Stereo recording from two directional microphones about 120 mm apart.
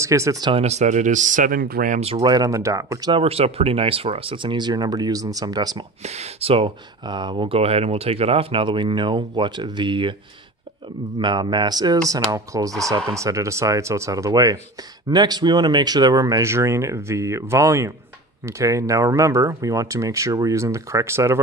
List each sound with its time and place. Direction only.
0.0 s speech: 25° right (ahead or behind)
0.5 s speech: 60° right (ahead or behind); by 2.0 s 90° right
2.2 s speech: 30° right (ahead or behind)
3.1 s speech: 50° right (ahead or behind); by 5.9 s 35° right (ahead or behind)
6.0 s speech: 65° right (ahead or behind); by 10.1 s 45° right (ahead or behind)
11.1 s speech: 40° right (ahead or behind); by 21.4 s 20° right (ahead or behind)